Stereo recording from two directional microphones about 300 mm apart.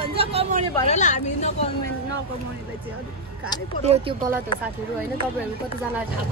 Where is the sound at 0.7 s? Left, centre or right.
Left.